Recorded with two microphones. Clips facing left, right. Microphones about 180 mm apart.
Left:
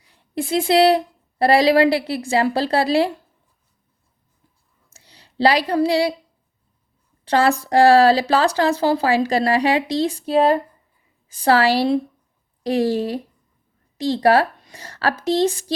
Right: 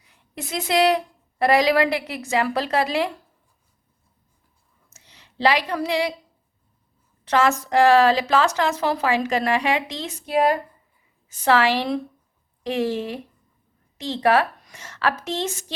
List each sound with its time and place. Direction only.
0.0 s a woman's voice: 30° left (ahead or behind)
4.9 s a sound: 35° left (ahead or behind)
7.3 s a woman's voice: 30° left (ahead or behind)